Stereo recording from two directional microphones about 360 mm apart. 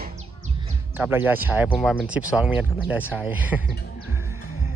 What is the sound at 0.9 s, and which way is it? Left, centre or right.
Speech, centre.